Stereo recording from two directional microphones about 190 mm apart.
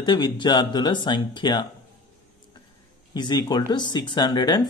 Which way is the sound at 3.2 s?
20° left (ahead or behind).